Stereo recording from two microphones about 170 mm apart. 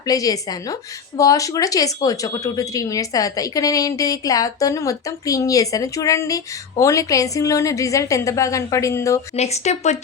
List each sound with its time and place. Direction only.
0.0 s a woman's voice: 20° left (ahead or behind)
9.3 s speech: 40° left (ahead or behind)